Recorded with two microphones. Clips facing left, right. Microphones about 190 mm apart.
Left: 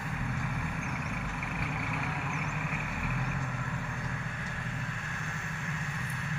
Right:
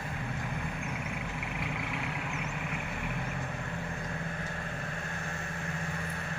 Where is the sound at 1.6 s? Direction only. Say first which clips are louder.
Even; centre (ahead or behind).